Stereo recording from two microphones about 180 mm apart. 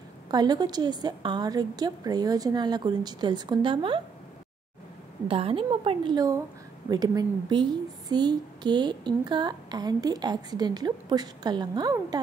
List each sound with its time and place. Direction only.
0.3 s a woman's voice: 20° right (ahead or behind)
5.3 s a woman's voice: 30° right (ahead or behind)